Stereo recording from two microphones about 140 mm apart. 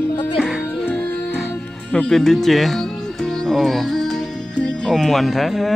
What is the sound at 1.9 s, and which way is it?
Speech, 5° left (ahead or behind).